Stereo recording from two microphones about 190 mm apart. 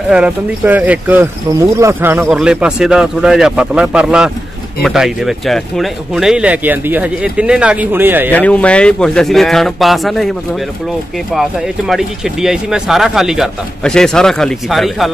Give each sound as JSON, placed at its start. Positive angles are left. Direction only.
{"t": 0.1, "sound": "speech", "side_deg": -5}
{"t": 8.4, "sound": "speech", "side_deg": 5}
{"t": 11.9, "sound": "speech", "side_deg": 0}